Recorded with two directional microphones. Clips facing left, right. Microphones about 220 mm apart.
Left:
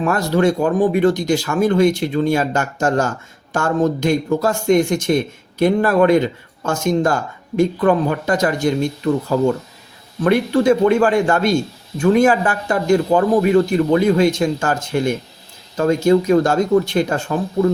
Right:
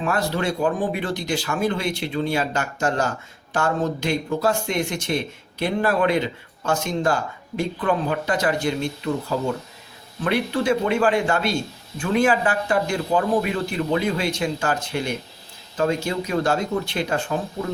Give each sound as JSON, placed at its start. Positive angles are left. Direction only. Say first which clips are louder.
{"t": 0.0, "sound": "speech", "louder": "left 7 dB", "side_deg": 45}
{"t": 10.2, "sound": "speech", "louder": "left 7 dB", "side_deg": 45}